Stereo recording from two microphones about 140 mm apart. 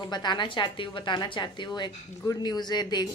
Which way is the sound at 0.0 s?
30° left (ahead or behind).